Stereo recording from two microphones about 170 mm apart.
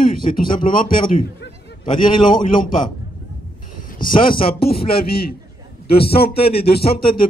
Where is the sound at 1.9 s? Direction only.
30° left (ahead or behind).